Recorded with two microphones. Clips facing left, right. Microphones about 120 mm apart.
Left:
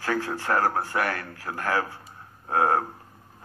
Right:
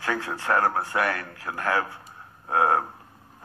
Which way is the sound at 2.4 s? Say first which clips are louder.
Right 1 dB; 40° left (ahead or behind).